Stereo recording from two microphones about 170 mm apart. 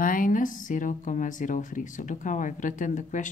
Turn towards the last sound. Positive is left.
turn(degrees=50)  # may be behind; listen again after turning